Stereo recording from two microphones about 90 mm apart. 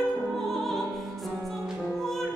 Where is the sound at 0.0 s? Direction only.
Centre (ahead or behind).